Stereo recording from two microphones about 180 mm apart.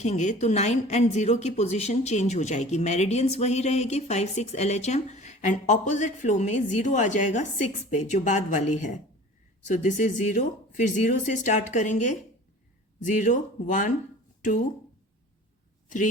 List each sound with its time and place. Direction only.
0.0 s a woman's voice: 40° left (ahead or behind)